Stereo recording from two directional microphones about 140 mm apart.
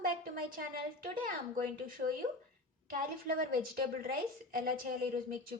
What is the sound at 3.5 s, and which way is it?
A woman's voice, 90° right.